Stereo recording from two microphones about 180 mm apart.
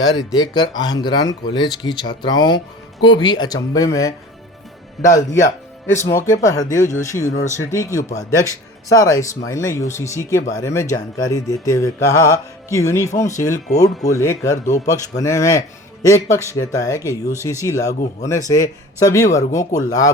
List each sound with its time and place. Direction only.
0.3 s speech: 25° left (ahead or behind)
5.0 s speech: centre (ahead or behind)
5.9 s speech: 15° left (ahead or behind)